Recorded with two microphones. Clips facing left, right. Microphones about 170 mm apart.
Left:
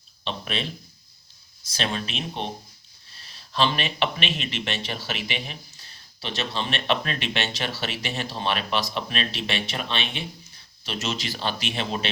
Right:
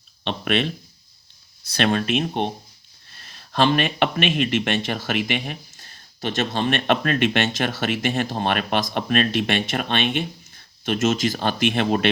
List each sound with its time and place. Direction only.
0.3 s speech: 65° right (ahead or behind)